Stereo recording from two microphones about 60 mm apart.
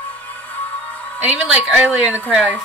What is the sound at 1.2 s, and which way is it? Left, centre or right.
Speech, centre.